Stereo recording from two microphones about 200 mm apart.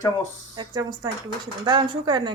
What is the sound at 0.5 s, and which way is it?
Speech, 20° right (ahead or behind).